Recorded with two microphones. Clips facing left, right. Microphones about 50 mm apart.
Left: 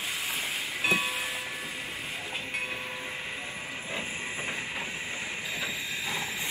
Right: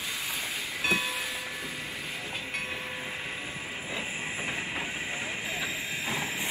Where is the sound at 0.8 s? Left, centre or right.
Left.